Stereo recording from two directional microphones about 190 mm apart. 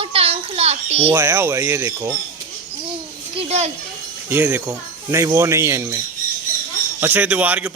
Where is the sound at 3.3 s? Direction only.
30° right (ahead or behind).